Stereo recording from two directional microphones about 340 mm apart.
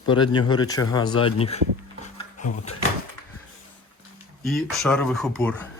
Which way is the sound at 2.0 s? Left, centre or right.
Left.